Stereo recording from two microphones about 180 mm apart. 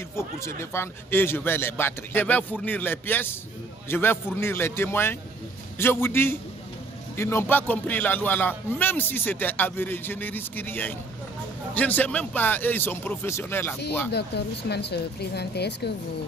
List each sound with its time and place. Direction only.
0.1 s speech: 15° left (ahead or behind)
14.1 s speech: 65° left (ahead or behind)